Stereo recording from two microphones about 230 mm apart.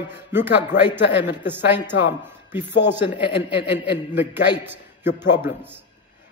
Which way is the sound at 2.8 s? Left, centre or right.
Centre.